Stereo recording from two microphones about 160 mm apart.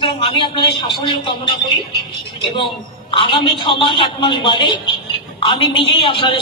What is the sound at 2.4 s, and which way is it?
A man's voice, 30° left (ahead or behind).